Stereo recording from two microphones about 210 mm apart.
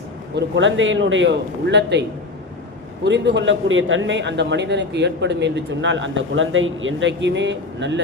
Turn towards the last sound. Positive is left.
turn(degrees=-60)  # may be behind; listen again after turning